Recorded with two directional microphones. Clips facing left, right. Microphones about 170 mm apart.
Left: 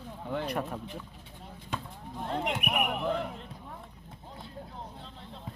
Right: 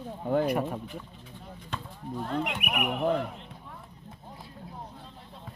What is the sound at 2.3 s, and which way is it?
Speech, 25° left (ahead or behind).